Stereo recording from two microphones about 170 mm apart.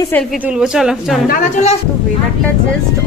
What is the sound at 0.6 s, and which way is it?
Speech, 5° right (ahead or behind).